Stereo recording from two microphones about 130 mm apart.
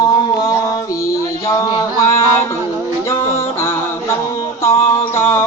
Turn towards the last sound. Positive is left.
turn(degrees=20)  # may be behind; listen again after turning